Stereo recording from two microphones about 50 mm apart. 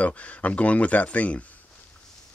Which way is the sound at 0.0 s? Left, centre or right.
Left.